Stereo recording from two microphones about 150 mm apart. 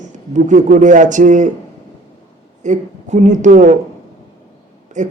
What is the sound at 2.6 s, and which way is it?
Speech, 55° right (ahead or behind).